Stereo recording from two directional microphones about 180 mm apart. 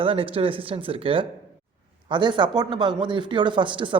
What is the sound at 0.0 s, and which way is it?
Speech, 30° right (ahead or behind).